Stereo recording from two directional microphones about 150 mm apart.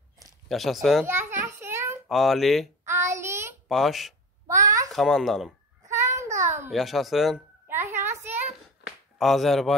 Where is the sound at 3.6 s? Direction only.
Centre (ahead or behind).